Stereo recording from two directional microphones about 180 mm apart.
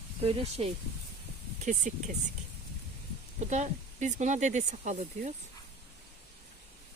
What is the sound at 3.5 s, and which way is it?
Speech, 40° right (ahead or behind).